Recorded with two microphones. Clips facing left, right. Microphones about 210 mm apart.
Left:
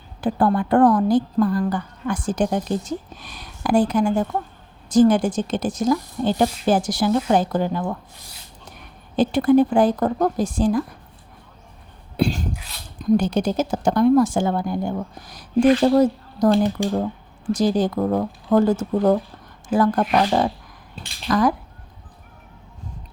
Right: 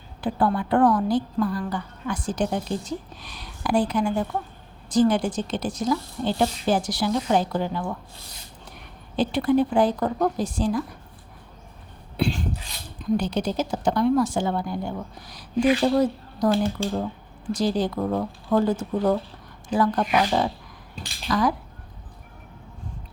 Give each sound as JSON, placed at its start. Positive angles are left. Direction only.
{"t": 0.2, "sound": "a woman's voice", "side_deg": 45}
{"t": 9.1, "sound": "a woman's voice", "side_deg": 45}
{"t": 12.1, "sound": "sneeze", "side_deg": 40}
{"t": 13.0, "sound": "a woman's voice", "side_deg": 45}
{"t": 16.8, "sound": "speech", "side_deg": 15}
{"t": 17.5, "sound": "a woman's voice", "side_deg": 45}